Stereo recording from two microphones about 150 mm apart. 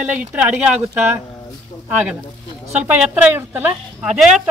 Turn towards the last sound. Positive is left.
turn(degrees=-5)  # may be behind; listen again after turning